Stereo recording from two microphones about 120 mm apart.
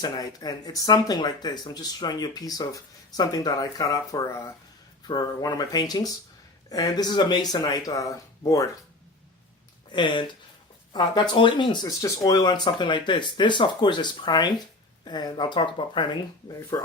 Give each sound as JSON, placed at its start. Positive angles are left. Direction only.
{"t": 0.0, "sound": "speech", "side_deg": 30}
{"t": 5.0, "sound": "speech", "side_deg": 35}
{"t": 9.9, "sound": "speech", "side_deg": 40}